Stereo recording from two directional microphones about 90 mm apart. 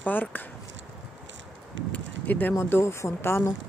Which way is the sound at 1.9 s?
20° left (ahead or behind).